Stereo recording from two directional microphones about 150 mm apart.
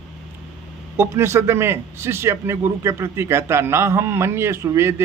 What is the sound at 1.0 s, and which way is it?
A man's voice, 15° right (ahead or behind).